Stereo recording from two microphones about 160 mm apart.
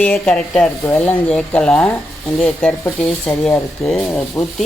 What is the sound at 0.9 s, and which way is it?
Speech, 15° left (ahead or behind).